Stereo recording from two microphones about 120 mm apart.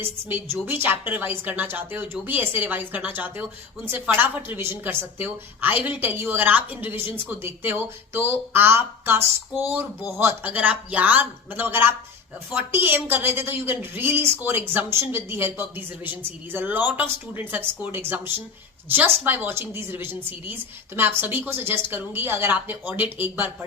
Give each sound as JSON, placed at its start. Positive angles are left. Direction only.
{"t": 0.0, "sound": "a woman's voice", "side_deg": -20}